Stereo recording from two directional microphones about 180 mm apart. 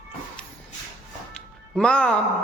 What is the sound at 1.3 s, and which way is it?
Music, 5° left (ahead or behind).